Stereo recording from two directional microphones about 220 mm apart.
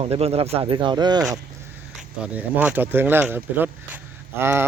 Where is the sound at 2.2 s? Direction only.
5° right (ahead or behind).